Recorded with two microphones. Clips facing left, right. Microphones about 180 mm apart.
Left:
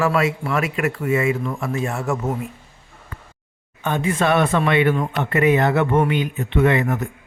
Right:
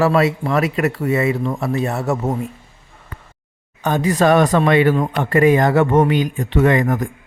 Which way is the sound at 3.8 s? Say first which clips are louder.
Right 5 dB; 40° right (ahead or behind).